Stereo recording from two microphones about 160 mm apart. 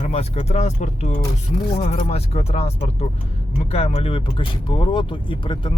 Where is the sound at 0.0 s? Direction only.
40° left (ahead or behind).